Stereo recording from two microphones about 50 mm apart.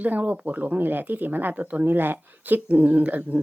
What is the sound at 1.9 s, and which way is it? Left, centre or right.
Speech, right.